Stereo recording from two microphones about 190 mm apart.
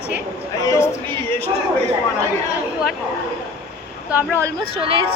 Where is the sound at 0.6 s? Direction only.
15° left (ahead or behind).